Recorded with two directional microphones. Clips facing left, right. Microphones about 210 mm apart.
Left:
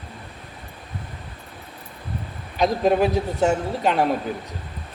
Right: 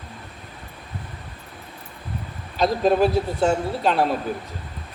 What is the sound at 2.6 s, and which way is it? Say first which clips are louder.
Speech: even; 15° left (ahead or behind).